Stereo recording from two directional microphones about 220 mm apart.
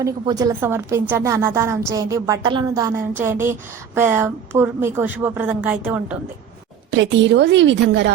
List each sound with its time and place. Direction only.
0.0 s a woman's voice: 15° right (ahead or behind)
6.9 s a woman's voice: 55° right (ahead or behind)